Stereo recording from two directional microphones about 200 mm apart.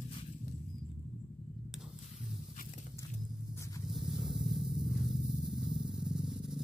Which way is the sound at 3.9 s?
Centre (ahead or behind).